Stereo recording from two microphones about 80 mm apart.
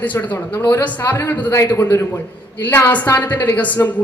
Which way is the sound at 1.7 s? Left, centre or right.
Left.